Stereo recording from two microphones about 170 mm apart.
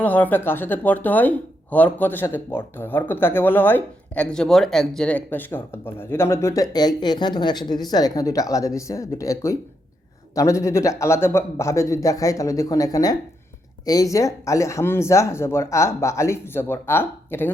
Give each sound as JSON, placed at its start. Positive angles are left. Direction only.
{"t": 0.0, "sound": "speech", "side_deg": 10}